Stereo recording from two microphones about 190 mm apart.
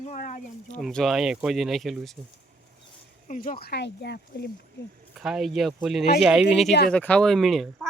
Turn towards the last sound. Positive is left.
turn(degrees=0)  # may be behind; listen again after turning